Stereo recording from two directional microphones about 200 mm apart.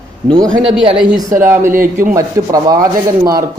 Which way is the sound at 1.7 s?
45° right (ahead or behind).